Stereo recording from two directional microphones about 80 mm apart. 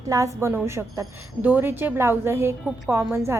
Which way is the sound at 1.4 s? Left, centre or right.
Centre.